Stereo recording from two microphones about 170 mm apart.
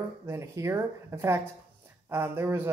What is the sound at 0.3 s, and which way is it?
Speech, 15° right (ahead or behind).